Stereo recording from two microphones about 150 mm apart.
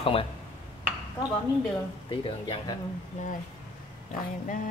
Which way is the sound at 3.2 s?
55° left (ahead or behind).